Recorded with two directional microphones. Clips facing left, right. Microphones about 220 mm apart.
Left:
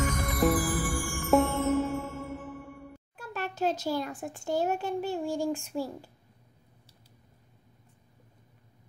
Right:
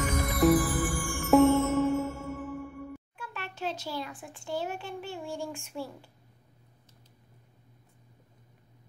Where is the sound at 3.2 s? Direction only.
40° left (ahead or behind).